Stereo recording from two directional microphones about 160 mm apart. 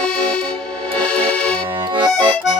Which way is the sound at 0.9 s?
5° left (ahead or behind).